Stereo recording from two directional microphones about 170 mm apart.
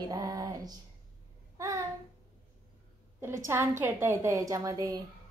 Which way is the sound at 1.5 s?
20° right (ahead or behind).